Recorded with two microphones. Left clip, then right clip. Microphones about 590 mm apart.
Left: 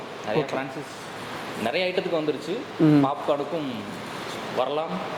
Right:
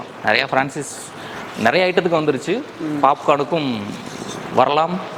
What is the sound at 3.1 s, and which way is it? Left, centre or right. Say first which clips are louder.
Speech: right 10 dB; right.